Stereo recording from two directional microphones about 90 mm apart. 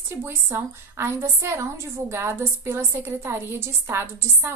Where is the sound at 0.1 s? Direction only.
25° right (ahead or behind).